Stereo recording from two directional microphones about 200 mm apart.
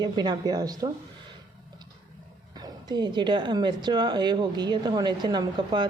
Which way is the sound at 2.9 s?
20° right (ahead or behind).